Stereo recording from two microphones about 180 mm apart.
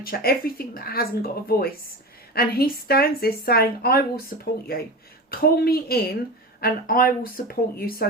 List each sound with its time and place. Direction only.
0.0 s speech: 55° left (ahead or behind)